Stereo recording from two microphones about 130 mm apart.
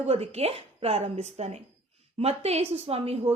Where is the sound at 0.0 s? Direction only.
50° right (ahead or behind).